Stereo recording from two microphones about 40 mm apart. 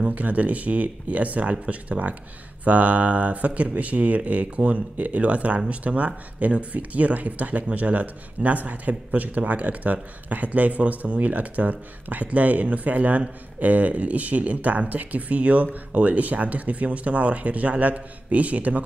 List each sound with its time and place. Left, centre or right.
0.0 s speech: right